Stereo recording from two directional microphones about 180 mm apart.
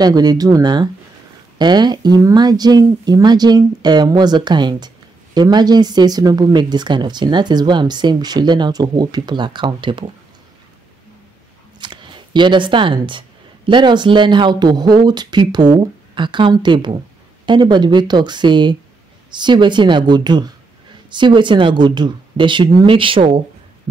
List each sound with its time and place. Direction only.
0.0 s speech: 20° right (ahead or behind)
11.8 s shuffling cards: 25° right (ahead or behind)
13.7 s speech: 25° right (ahead or behind)